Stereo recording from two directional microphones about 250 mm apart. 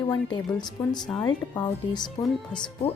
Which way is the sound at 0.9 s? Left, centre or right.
Centre.